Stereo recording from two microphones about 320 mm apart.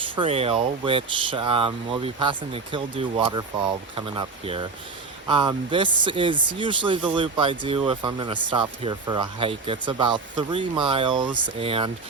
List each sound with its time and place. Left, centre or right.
0.2 s speech: centre